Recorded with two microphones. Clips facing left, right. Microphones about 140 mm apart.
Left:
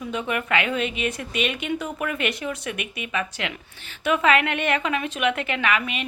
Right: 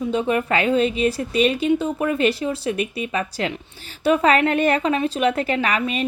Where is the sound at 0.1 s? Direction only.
30° right (ahead or behind).